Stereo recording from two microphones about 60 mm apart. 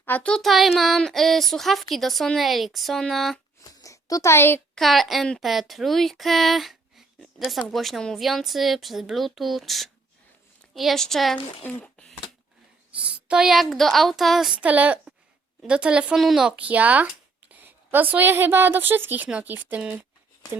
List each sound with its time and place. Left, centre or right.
0.2 s a child's voice: centre
0.4 s a woman's voice: centre
3.6 s a sound: left
4.8 s a woman's voice: centre
11.7 s a sound: left
13.0 s a woman's voice: centre
14.5 s speech: right
16.1 s a woman's voice: centre
16.5 s a woman's voice: right